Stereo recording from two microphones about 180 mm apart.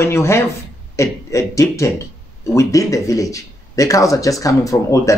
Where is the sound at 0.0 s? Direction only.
15° left (ahead or behind).